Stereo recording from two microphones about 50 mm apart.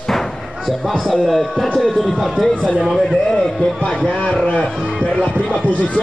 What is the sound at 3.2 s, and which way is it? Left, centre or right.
Speech, centre.